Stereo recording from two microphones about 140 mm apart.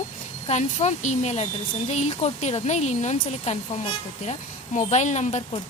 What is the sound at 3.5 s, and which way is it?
Speech, 50° left (ahead or behind).